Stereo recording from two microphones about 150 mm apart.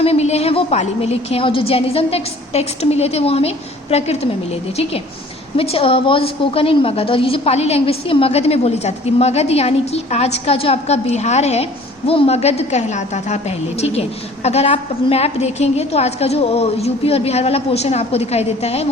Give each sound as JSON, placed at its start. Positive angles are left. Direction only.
{"t": 0.0, "sound": "a woman's voice", "side_deg": 45}
{"t": 5.5, "sound": "a woman's voice", "side_deg": 40}